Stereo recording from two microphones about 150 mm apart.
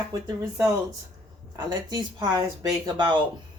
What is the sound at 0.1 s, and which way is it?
A woman's voice, 25° right (ahead or behind).